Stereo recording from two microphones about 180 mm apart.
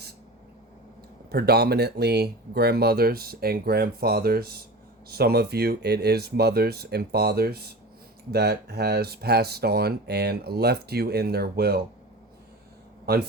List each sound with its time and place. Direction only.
1.3 s speech: 60° right (ahead or behind)
13.1 s speech: 60° right (ahead or behind)